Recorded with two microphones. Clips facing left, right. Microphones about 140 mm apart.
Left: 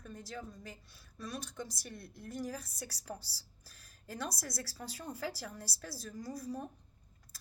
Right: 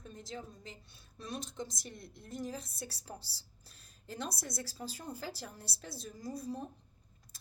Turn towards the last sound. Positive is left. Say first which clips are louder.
# even
turn(degrees=-25)  # may be behind; listen again after turning